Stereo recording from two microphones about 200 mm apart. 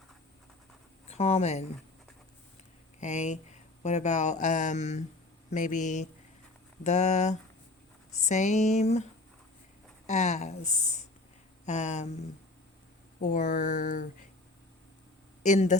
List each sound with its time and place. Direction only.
1.0 s speech: 30° left (ahead or behind)
3.0 s speech: 35° left (ahead or behind)
10.1 s speech: 35° left (ahead or behind)
13.1 s speech: 40° left (ahead or behind)
15.4 s speech: 35° left (ahead or behind)